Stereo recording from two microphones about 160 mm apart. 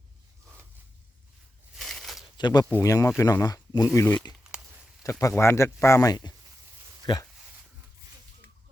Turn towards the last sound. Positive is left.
turn(degrees=25)  # may be behind; listen again after turning